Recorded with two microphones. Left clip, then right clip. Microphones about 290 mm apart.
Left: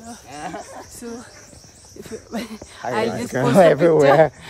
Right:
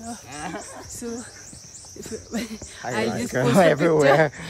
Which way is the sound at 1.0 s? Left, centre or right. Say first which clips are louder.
Right 4 dB; centre.